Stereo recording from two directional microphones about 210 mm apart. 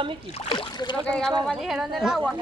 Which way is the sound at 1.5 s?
Centre (ahead or behind).